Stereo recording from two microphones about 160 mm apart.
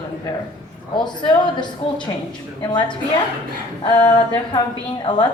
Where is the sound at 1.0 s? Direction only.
30° left (ahead or behind).